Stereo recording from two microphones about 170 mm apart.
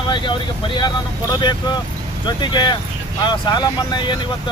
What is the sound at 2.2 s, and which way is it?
Speech, 25° left (ahead or behind).